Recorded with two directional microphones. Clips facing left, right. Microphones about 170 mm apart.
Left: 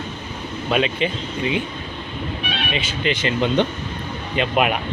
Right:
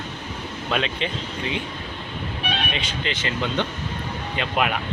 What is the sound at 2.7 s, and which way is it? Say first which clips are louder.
Speech: left 5 dB; 10° left (ahead or behind).